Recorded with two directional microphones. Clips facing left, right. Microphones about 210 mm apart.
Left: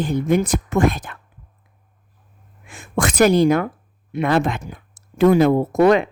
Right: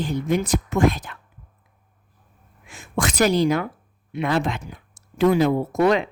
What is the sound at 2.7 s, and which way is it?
Speech, 50° left (ahead or behind).